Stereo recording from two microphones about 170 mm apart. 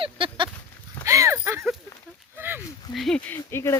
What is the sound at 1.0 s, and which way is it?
Horse, 15° right (ahead or behind).